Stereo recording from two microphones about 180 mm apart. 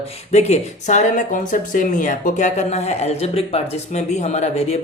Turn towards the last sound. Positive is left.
turn(degrees=35)  # may be behind; listen again after turning